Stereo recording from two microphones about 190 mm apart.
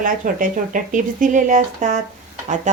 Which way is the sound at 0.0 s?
45° right (ahead or behind).